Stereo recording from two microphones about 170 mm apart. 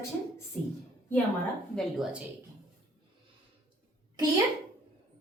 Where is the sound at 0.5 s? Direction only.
5° left (ahead or behind).